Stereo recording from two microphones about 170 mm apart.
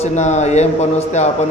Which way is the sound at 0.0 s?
40° left (ahead or behind).